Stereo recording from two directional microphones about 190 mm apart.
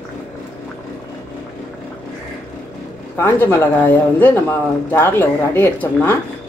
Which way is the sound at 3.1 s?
10° left (ahead or behind).